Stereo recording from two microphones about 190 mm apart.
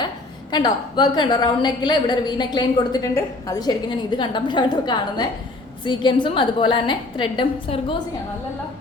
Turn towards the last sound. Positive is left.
turn(degrees=25)  # may be behind; listen again after turning